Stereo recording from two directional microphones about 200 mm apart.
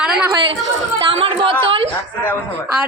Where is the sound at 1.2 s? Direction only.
30° right (ahead or behind).